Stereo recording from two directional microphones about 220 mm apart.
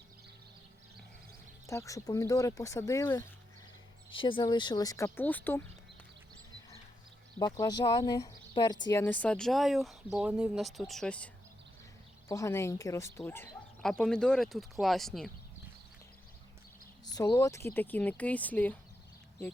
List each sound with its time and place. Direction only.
1.6 s speech: 15° left (ahead or behind)
4.1 s speech: 20° left (ahead or behind)
7.6 s speech: 20° left (ahead or behind)
12.3 s speech: 15° left (ahead or behind)
17.1 s speech: 15° left (ahead or behind)